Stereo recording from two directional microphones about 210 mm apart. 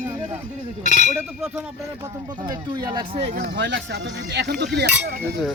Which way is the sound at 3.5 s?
55° right (ahead or behind).